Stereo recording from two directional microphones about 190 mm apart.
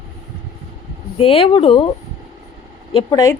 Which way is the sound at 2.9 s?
20° left (ahead or behind).